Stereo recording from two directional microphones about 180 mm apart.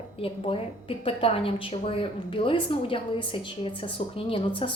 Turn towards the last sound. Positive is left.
turn(degrees=30)  # may be behind; listen again after turning